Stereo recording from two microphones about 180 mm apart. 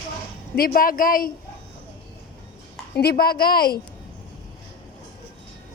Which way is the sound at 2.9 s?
60° left (ahead or behind).